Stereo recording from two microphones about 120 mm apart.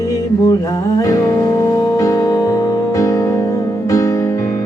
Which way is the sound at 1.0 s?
25° left (ahead or behind).